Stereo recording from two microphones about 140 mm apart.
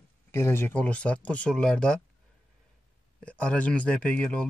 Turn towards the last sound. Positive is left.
turn(degrees=10)  # may be behind; listen again after turning